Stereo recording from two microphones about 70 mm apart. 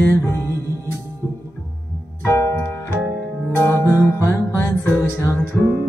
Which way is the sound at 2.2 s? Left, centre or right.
Left.